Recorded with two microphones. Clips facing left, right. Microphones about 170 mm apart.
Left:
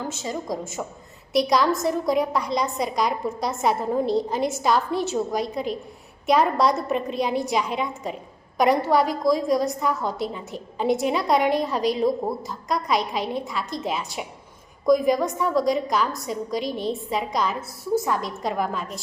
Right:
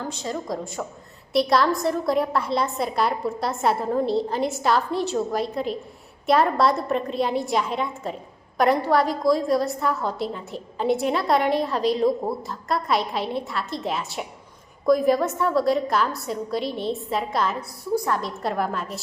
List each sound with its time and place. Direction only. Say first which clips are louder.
0.0 s a woman's voice: even; 5° left (ahead or behind)
9.5 s a woman's voice: even; 15° left (ahead or behind)
9.8 s a woman's voice: even; centre (ahead or behind)
16.6 s a woman's voice: even; 40° left (ahead or behind)
16.9 s a woman's voice: even; centre (ahead or behind)